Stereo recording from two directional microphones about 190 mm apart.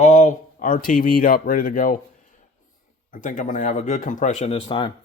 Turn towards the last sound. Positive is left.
turn(degrees=25)  # may be behind; listen again after turning